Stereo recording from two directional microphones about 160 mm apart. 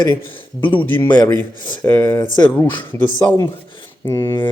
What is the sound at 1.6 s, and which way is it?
Speech, 25° left (ahead or behind).